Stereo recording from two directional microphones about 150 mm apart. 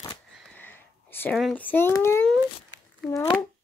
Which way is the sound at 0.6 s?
15° left (ahead or behind).